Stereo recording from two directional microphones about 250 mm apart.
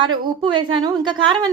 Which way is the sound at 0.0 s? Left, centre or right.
Centre.